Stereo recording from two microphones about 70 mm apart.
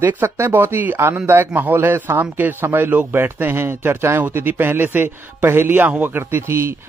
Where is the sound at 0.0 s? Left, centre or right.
Right.